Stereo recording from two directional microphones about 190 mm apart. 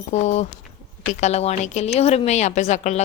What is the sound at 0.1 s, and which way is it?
A woman's voice, 35° left (ahead or behind).